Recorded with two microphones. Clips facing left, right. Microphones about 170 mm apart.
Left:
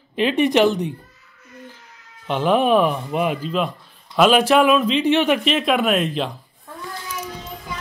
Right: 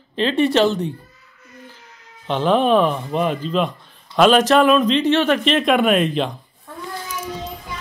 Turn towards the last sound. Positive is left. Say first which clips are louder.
# right 3 dB
turn(degrees=0)  # may be behind; listen again after turning